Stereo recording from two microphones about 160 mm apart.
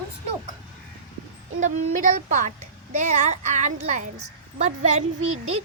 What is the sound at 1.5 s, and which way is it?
Speech, 50° right (ahead or behind).